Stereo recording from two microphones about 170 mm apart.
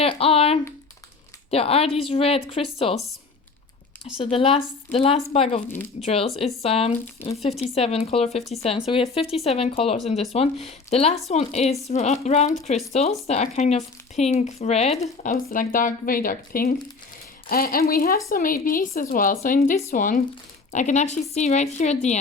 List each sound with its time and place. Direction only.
0.0 s speech: 35° left (ahead or behind)
4.2 s speech: 30° left (ahead or behind)
15.2 s speech: 50° left (ahead or behind)
19.5 s speech: 40° left (ahead or behind)
19.9 s a woman's voice: 55° left (ahead or behind)